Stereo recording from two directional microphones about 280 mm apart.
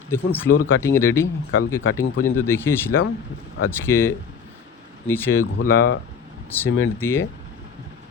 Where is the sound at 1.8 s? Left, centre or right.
Left.